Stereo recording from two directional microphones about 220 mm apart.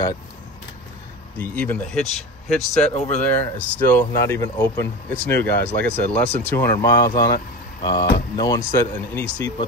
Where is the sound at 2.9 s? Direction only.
30° left (ahead or behind).